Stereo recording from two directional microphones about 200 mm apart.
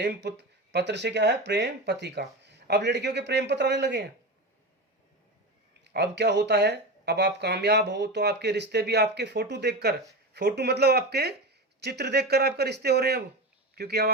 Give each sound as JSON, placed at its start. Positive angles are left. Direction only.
{"t": 0.0, "sound": "speech", "side_deg": -60}
{"t": 5.8, "sound": "speech", "side_deg": -60}